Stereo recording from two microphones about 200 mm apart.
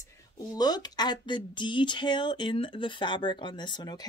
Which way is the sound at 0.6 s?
20° left (ahead or behind).